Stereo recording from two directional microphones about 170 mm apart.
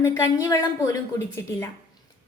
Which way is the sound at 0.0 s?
15° left (ahead or behind).